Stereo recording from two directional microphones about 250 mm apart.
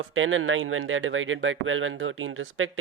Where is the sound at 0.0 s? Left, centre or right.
Right.